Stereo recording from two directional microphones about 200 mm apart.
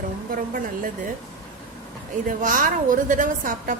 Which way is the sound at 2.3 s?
40° right (ahead or behind).